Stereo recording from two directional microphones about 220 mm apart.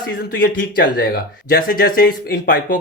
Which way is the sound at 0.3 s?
40° left (ahead or behind).